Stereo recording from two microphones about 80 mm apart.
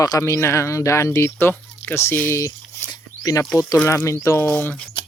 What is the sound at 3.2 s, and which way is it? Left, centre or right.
Speech, left.